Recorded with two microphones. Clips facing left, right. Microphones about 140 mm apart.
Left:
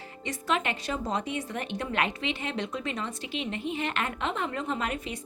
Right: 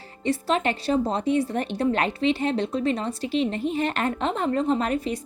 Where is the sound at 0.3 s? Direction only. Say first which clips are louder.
Right 6 dB; 30° right (ahead or behind).